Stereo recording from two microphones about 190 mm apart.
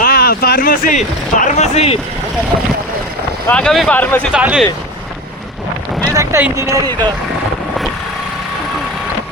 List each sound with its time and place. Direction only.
0.0 s speech: 55° left (ahead or behind); by 2.0 s 35° left (ahead or behind)
3.4 s speech: 5° left (ahead or behind)
4.3 s speech: 5° right (ahead or behind)
6.1 s speech: 15° right (ahead or behind)